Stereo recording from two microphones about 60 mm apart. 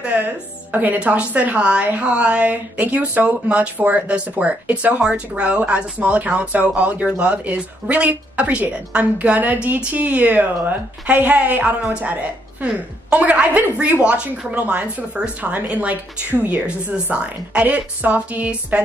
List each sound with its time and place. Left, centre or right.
0.1 s speech: right
5.0 s speech: centre